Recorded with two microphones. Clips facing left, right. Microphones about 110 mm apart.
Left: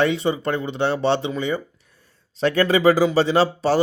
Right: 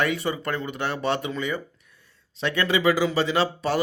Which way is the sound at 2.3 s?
40° left (ahead or behind).